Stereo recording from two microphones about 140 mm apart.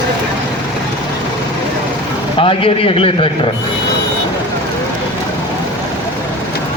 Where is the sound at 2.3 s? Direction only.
40° left (ahead or behind).